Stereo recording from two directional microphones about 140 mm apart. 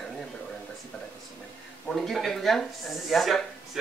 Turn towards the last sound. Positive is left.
turn(degrees=0)  # may be behind; listen again after turning